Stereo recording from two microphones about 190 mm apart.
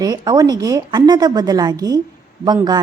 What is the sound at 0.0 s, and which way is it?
A woman's voice, 20° right (ahead or behind).